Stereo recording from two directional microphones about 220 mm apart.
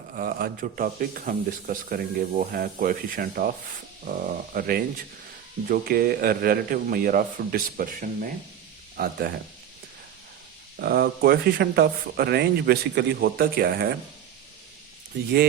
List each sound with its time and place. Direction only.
0.1 s speech: 40° right (ahead or behind)
10.8 s speech: 45° right (ahead or behind)